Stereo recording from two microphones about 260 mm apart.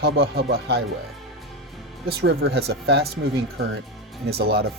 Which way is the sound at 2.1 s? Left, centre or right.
Right.